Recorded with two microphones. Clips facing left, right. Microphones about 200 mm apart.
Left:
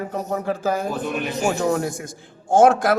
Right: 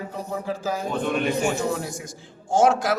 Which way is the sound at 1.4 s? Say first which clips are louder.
Left 4 dB; 55° left (ahead or behind).